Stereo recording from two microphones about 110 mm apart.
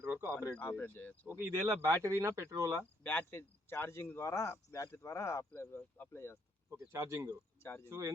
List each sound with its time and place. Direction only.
0.0 s a sound: 25° right (ahead or behind)
0.6 s speech: 15° left (ahead or behind)
1.4 s speech: 20° right (ahead or behind)
3.0 s speech: 15° left (ahead or behind)
6.8 s speech: 25° right (ahead or behind)